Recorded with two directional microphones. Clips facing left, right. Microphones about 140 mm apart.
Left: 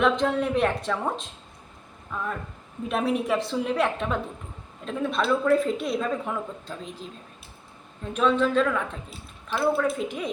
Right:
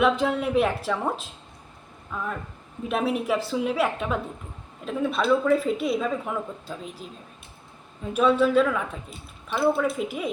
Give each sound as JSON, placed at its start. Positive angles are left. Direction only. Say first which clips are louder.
{"t": 0.0, "sound": "a woman's voice", "louder": "even", "side_deg": -5}